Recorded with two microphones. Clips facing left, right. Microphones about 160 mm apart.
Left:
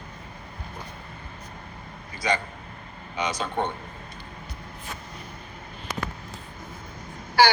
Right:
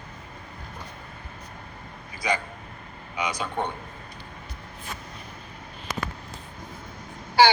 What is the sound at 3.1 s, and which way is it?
Speech, 10° right (ahead or behind).